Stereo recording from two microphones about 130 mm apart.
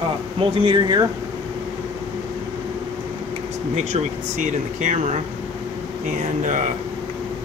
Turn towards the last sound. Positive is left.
turn(degrees=-75)  # may be behind; listen again after turning